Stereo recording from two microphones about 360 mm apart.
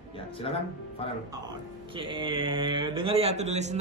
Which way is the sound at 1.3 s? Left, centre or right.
Centre.